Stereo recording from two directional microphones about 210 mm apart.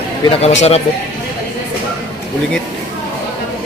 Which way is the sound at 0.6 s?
30° left (ahead or behind).